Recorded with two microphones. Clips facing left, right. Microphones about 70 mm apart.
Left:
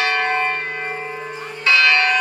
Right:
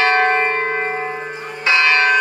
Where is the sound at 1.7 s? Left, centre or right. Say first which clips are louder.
Right 1 dB; right.